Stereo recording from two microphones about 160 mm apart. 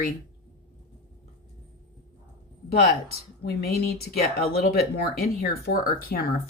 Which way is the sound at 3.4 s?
80° left.